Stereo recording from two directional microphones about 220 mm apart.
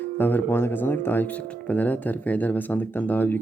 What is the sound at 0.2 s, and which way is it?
Speech, 10° left (ahead or behind).